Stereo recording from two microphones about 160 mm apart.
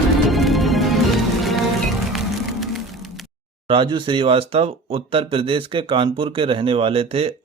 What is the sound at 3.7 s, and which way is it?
Speech, 30° right (ahead or behind).